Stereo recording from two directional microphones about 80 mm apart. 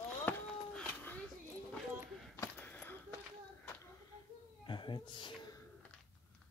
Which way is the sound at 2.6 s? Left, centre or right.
Left.